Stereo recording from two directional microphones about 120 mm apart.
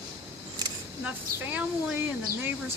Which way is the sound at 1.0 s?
15° right (ahead or behind).